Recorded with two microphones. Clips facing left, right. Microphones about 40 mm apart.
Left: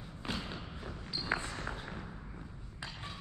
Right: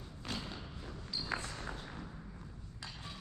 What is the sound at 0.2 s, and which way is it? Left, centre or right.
Thump, left.